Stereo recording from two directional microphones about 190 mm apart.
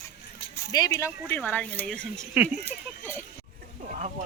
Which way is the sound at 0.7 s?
15° left (ahead or behind).